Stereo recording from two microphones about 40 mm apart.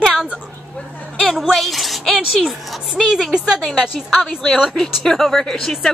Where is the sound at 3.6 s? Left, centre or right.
Centre.